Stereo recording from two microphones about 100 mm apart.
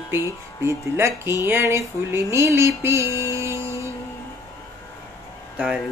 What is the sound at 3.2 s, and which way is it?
Music, 30° right (ahead or behind).